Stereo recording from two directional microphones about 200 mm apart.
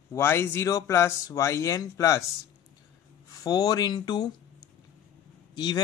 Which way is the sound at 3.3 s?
20° left (ahead or behind).